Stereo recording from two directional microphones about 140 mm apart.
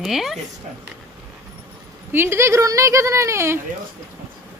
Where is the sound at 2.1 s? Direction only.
15° right (ahead or behind).